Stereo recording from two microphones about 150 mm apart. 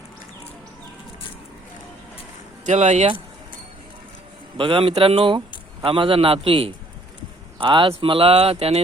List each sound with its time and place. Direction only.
2.6 s speech: 50° right (ahead or behind)
4.5 s speech: 35° right (ahead or behind)